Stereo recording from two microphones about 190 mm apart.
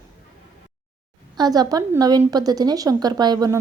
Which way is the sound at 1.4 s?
20° right (ahead or behind).